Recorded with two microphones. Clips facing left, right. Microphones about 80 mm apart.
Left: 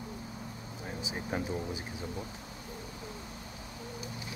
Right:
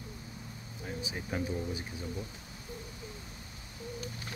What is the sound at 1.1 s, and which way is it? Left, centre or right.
Speech, left.